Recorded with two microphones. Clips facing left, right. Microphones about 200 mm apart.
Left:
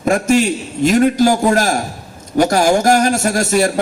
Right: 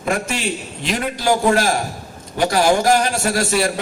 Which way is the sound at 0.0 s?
45° left (ahead or behind).